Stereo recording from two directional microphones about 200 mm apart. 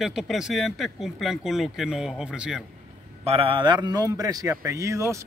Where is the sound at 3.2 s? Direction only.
30° right (ahead or behind).